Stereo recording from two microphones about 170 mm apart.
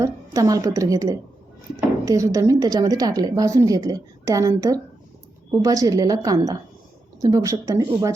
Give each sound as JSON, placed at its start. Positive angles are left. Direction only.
{"t": 0.0, "sound": "a woman's voice", "side_deg": -20}